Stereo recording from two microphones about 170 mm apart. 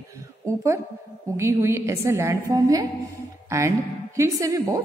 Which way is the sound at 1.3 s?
15° right (ahead or behind).